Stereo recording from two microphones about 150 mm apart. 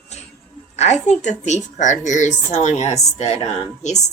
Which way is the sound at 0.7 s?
50° left (ahead or behind).